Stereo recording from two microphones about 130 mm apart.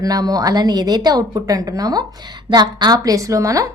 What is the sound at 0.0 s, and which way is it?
A woman's voice, 30° right (ahead or behind).